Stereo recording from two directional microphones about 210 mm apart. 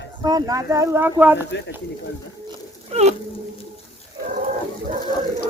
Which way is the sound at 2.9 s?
30° right (ahead or behind).